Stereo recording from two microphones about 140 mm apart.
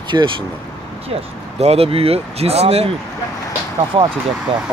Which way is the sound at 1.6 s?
45° right (ahead or behind).